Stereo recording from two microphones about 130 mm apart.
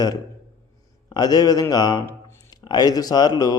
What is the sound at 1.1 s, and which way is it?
A man's voice, 30° left (ahead or behind).